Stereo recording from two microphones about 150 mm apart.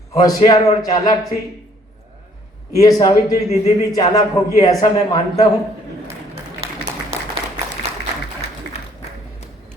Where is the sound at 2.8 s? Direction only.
25° left (ahead or behind).